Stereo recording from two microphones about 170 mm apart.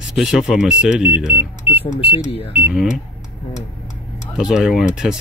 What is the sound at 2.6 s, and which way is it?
Speech, 5° right (ahead or behind).